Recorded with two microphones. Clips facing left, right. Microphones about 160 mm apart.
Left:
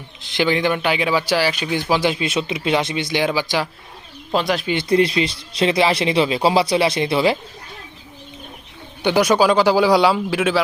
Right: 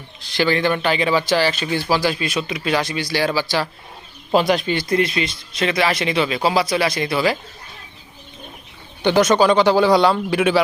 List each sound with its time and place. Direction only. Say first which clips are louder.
0.2 s speech: even; 20° left (ahead or behind)
4.3 s speech: right 3 dB; 5° right (ahead or behind)
4.7 s speech: left 2 dB; 25° left (ahead or behind)
9.0 s speech: right 1 dB; 10° left (ahead or behind)